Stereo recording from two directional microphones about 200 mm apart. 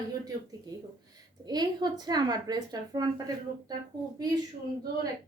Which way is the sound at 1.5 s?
20° right (ahead or behind).